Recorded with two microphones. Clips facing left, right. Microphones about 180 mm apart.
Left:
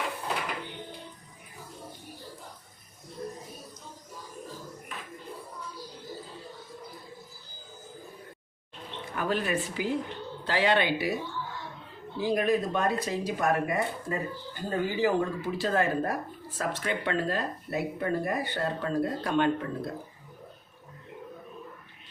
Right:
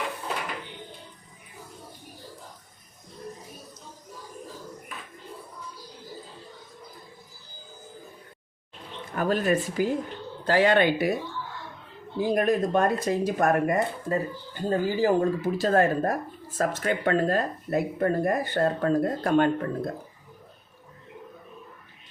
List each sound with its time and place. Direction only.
9.1 s speech: 45° right (ahead or behind)
12.2 s speech: 50° right (ahead or behind)
14.5 s speech: 35° right (ahead or behind)